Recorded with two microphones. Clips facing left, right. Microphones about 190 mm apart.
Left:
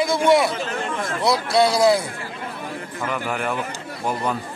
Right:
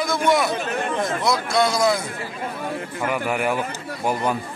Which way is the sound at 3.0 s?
5° right (ahead or behind).